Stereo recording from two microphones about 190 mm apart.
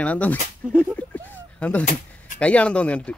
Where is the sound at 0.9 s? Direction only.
10° left (ahead or behind).